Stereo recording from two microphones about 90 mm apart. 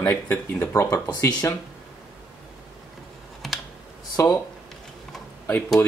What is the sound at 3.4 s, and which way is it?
Computer keyboard, centre (ahead or behind).